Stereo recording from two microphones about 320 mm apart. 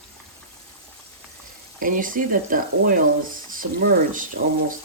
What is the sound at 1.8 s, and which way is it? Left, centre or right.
Speech, right.